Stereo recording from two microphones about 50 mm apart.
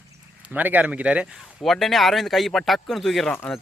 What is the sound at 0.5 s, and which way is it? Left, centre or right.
Speech, right.